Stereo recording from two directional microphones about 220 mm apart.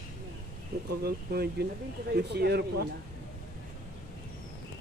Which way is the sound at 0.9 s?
45° right (ahead or behind).